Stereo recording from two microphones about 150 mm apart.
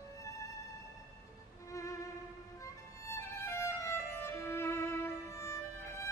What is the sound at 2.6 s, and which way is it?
Violin, 20° left (ahead or behind).